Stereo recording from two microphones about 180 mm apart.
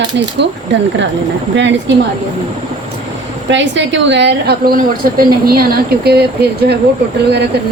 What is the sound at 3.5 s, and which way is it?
A woman's voice, 90° right.